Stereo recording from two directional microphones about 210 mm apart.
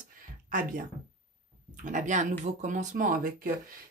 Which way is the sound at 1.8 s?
35° right (ahead or behind).